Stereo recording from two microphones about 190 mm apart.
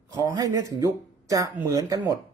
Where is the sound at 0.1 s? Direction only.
20° right (ahead or behind).